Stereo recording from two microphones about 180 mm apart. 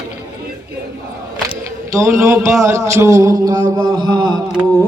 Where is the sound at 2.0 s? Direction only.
15° right (ahead or behind).